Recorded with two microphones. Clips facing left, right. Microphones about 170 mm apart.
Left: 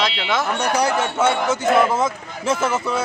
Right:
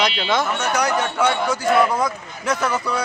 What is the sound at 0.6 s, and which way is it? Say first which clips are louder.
A man's voice: left 1 dB; 30° left (ahead or behind).